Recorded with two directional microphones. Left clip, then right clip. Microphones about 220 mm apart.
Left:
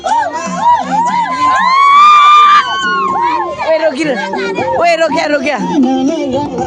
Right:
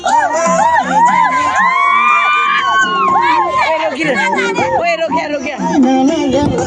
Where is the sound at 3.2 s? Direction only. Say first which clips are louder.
Right 2 dB; 40° right (ahead or behind).